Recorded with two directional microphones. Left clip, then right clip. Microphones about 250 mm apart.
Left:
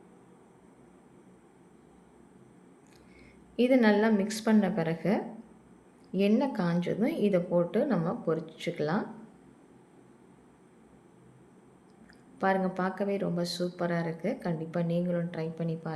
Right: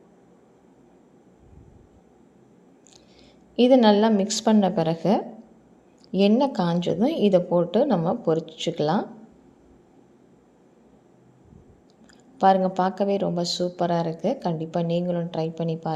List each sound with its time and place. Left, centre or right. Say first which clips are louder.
3.5 s a woman's voice: right 8 dB; right
12.4 s a woman's voice: right 10 dB; centre